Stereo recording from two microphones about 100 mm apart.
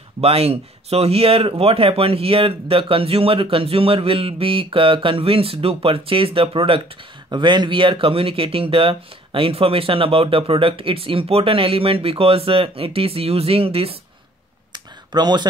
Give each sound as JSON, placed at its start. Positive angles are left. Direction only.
{"t": 0.2, "sound": "speech", "side_deg": -85}
{"t": 7.2, "sound": "speech", "side_deg": -50}
{"t": 14.7, "sound": "clicking", "side_deg": -45}